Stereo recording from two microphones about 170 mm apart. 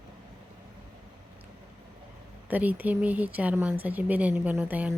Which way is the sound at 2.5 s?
10° right (ahead or behind).